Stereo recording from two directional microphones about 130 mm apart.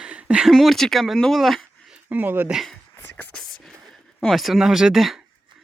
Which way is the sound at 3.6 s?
Centre (ahead or behind).